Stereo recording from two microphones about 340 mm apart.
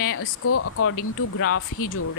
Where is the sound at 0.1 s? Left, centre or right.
Left.